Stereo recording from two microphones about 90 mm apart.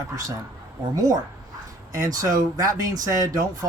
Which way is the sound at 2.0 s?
45° right (ahead or behind).